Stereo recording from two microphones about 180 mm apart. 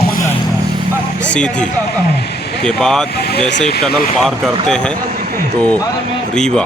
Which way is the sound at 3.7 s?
60° left (ahead or behind).